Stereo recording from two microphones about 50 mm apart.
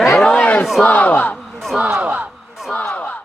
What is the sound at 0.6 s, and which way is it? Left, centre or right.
Battle cry, centre.